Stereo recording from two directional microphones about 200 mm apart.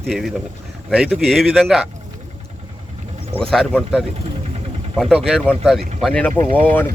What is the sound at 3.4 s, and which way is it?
Speech, 5° left (ahead or behind).